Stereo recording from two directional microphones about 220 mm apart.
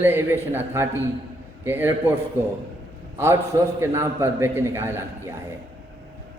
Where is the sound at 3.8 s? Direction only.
10° right (ahead or behind).